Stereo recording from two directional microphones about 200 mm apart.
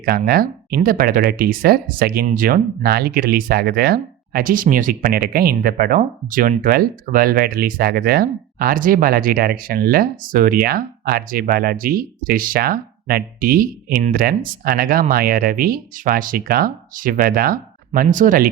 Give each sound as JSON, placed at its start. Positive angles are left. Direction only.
{"t": 0.0, "sound": "speech", "side_deg": -50}